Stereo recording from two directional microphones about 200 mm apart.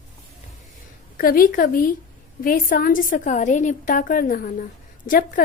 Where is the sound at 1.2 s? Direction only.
45° left (ahead or behind).